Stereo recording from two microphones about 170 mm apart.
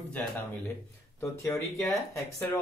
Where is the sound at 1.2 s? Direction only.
15° left (ahead or behind).